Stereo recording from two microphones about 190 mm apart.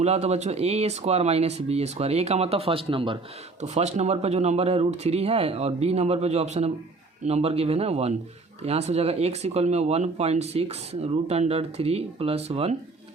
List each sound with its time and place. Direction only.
0.0 s speech: 35° right (ahead or behind)